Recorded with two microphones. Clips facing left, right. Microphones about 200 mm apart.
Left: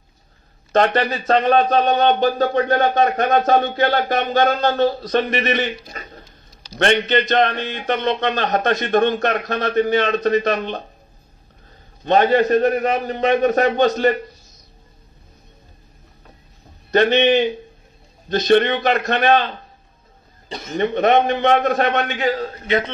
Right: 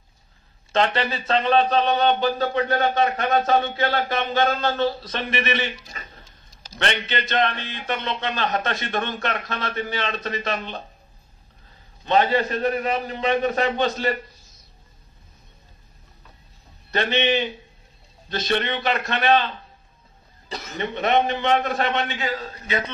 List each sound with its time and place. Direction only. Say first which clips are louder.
0.7 s speech: left 5 dB; 45° left (ahead or behind)
12.0 s speech: left 5 dB; 45° left (ahead or behind)
16.9 s speech: left 7 dB; 45° left (ahead or behind)
20.7 s speech: left 6 dB; 45° left (ahead or behind)